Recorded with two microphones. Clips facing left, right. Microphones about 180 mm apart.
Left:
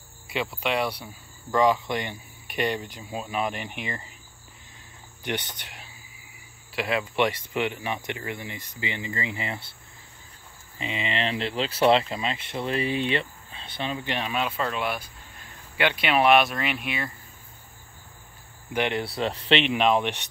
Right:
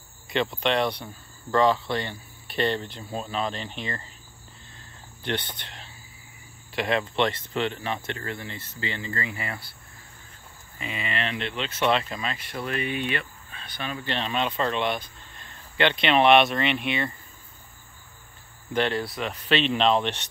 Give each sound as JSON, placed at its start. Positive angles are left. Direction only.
{"t": 0.3, "sound": "speech", "side_deg": 10}
{"t": 5.2, "sound": "speech", "side_deg": 10}
{"t": 10.8, "sound": "speech", "side_deg": 25}
{"t": 18.7, "sound": "speech", "side_deg": 15}
{"t": 19.0, "sound": "speech", "side_deg": 30}